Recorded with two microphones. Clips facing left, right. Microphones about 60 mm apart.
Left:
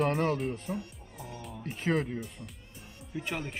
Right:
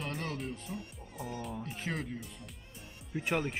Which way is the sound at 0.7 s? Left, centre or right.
Left.